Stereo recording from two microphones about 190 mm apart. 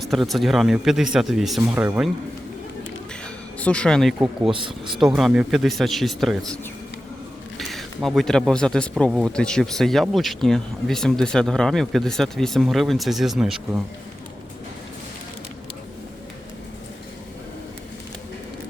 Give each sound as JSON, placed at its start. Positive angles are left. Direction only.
{"t": 0.0, "sound": "speech", "side_deg": 0}
{"t": 3.6, "sound": "speech", "side_deg": 5}
{"t": 4.5, "sound": "speech", "side_deg": -25}
{"t": 4.9, "sound": "speech", "side_deg": 0}
{"t": 7.6, "sound": "speech", "side_deg": 0}